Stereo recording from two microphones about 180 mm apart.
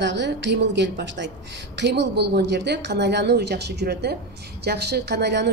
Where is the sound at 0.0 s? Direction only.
75° right (ahead or behind).